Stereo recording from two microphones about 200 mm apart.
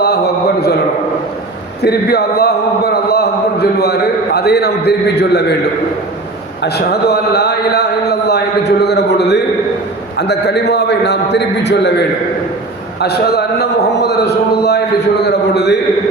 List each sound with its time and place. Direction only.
1.8 s a man's voice: 55° left (ahead or behind)
6.6 s a man's voice: 55° left (ahead or behind)